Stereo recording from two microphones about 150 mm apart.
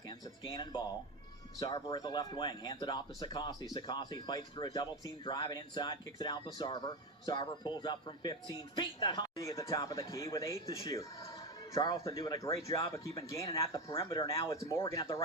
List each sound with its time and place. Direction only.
0.5 s speech: 30° left (ahead or behind)